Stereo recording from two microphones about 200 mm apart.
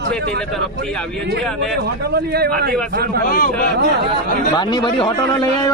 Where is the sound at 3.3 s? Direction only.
45° left (ahead or behind).